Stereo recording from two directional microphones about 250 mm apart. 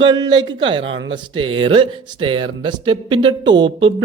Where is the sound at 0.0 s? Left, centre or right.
Centre.